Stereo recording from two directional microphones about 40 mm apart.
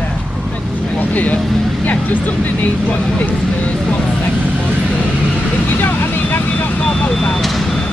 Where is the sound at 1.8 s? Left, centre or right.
Left.